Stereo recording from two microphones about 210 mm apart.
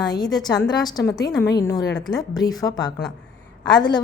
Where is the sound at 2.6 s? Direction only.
20° left (ahead or behind).